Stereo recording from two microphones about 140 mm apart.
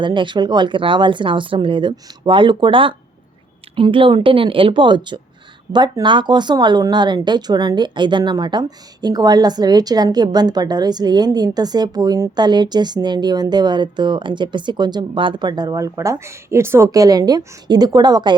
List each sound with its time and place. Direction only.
0.0 s speech: 35° right (ahead or behind)